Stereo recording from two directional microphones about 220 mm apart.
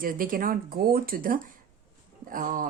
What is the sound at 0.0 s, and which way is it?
Speech, 40° right (ahead or behind).